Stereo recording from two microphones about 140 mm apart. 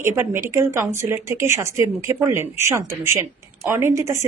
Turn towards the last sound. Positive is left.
turn(degrees=-20)  # may be behind; listen again after turning